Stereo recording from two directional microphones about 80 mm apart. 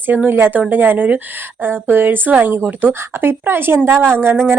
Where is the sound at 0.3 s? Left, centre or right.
Right.